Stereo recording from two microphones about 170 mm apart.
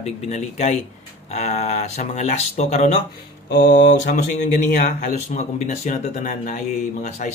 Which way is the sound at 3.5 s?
65° left (ahead or behind).